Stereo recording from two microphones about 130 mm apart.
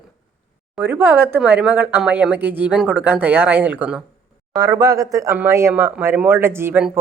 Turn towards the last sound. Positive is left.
turn(degrees=-15)  # may be behind; listen again after turning